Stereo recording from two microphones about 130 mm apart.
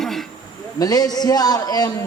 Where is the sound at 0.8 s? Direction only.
30° left (ahead or behind).